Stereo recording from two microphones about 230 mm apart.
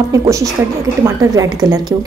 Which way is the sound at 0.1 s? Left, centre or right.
Centre.